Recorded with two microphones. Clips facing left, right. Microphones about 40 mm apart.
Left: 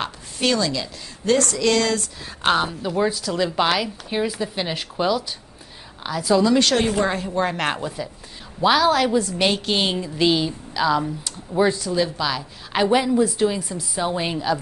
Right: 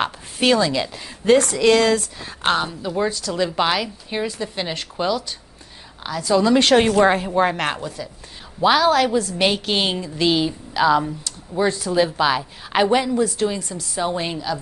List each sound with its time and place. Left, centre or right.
0.0 s a woman's voice: right; by 6.4 s centre
6.6 s a woman's voice: right
7.2 s speech: centre
7.5 s a woman's voice: centre
7.8 s speech: centre
8.5 s a woman's voice: centre
10.3 s speech: centre
11.2 s speech: centre
11.8 s a woman's voice: centre
12.9 s speech: centre
13.9 s a woman's voice: centre